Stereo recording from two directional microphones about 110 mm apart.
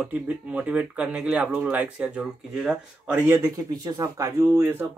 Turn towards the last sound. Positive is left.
turn(degrees=-20)  # may be behind; listen again after turning